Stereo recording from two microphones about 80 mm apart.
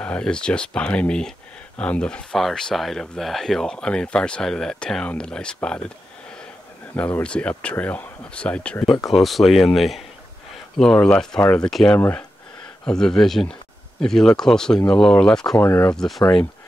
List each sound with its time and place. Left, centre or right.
0.0 s speech: centre
7.0 s speech: centre
8.8 s speech: centre
12.0 s speech: centre
12.8 s speech: centre
15.6 s speech: left
15.9 s speech: centre